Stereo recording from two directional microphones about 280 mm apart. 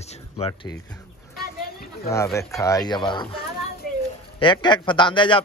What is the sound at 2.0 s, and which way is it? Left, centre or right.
A man's voice, centre.